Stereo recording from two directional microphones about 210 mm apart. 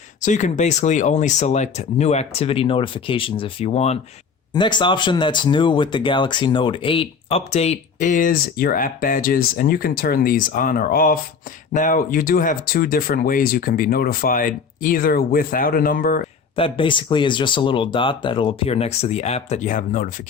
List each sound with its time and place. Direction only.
0.2 s speech: 35° left (ahead or behind)
16.6 s speech: 25° left (ahead or behind)